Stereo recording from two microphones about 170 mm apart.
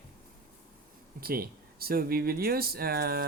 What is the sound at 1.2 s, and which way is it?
Speech, 60° right (ahead or behind).